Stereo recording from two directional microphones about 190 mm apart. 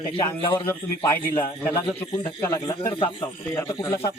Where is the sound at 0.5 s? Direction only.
10° left (ahead or behind).